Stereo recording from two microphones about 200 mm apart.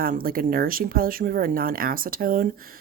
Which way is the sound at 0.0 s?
45° right (ahead or behind).